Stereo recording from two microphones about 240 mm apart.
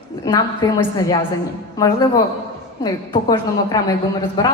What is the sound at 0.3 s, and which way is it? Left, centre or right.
A woman's voice, centre.